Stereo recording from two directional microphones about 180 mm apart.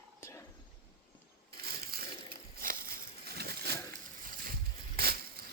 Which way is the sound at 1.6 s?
55° right (ahead or behind).